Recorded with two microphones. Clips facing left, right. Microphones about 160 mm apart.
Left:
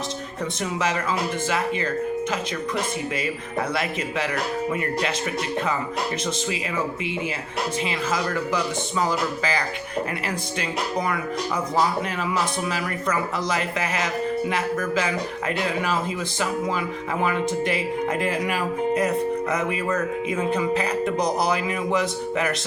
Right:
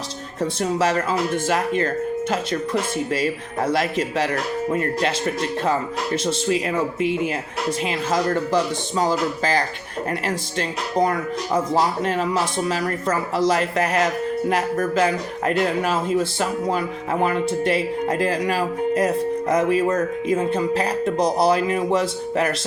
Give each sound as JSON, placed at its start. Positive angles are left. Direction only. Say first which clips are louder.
{"t": 0.6, "sound": "speech", "louder": "right 5 dB", "side_deg": -40}
{"t": 3.7, "sound": "speech", "louder": "right 5 dB", "side_deg": -40}
{"t": 7.9, "sound": "speech", "louder": "right 4 dB", "side_deg": -45}
{"t": 18.1, "sound": "speech", "louder": "right 5 dB", "side_deg": -40}
{"t": 19.8, "sound": "speech", "louder": "right 4 dB", "side_deg": -30}